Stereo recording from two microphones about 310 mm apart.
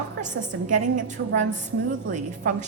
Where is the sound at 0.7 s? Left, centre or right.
Right.